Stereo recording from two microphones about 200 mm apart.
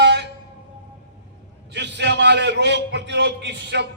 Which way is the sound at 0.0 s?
60° right (ahead or behind).